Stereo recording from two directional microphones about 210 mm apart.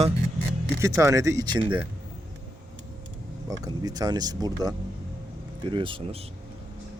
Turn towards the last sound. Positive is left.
turn(degrees=-25)  # may be behind; listen again after turning